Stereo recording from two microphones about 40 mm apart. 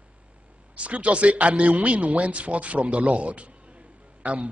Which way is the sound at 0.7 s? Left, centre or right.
Right.